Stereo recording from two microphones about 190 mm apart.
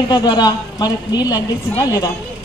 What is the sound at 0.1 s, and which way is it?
A woman's voice, 20° left (ahead or behind).